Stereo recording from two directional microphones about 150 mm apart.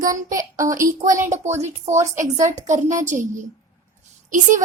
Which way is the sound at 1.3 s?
50° right (ahead or behind).